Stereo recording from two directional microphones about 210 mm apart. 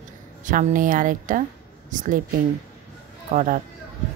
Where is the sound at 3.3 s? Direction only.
40° right (ahead or behind).